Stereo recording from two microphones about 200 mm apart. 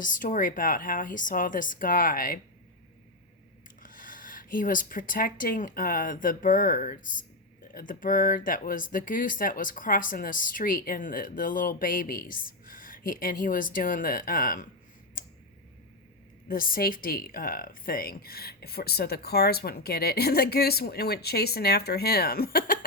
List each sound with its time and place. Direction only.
0.0 s speech: 40° left (ahead or behind)
3.8 s speech: 45° left (ahead or behind)
16.5 s speech: 45° left (ahead or behind)